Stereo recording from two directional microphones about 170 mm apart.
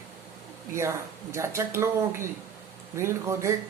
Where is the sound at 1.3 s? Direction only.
15° right (ahead or behind).